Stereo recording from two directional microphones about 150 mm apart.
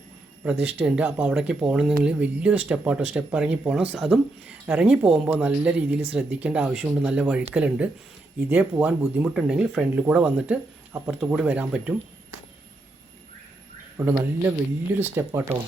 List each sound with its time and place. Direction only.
0.6 s speech: 10° right (ahead or behind)
13.9 s speech: 15° right (ahead or behind)